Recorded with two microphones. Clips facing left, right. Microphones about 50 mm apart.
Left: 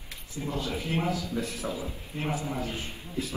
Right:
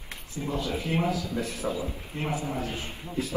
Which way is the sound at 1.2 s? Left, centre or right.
Right.